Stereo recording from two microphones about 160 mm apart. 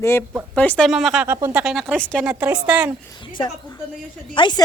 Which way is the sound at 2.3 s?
10° right (ahead or behind).